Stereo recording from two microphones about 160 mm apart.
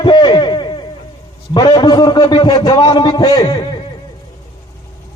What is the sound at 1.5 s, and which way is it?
A man's voice, 25° left (ahead or behind).